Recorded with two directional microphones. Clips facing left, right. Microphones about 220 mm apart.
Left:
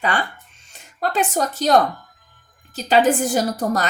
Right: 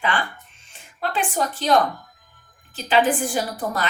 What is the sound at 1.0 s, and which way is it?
Speech, 40° left (ahead or behind).